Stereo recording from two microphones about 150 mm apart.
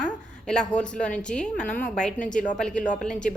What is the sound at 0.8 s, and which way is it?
Speech, 5° left (ahead or behind).